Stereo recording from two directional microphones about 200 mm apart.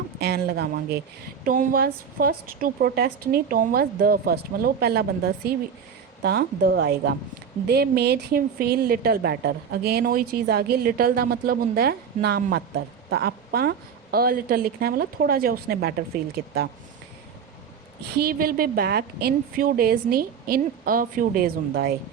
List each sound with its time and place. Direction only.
0.2 s a woman's voice: 50° right (ahead or behind)
18.2 s a woman's voice: 50° right (ahead or behind)